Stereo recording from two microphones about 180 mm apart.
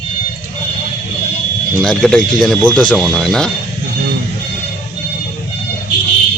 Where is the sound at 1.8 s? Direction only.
5° left (ahead or behind).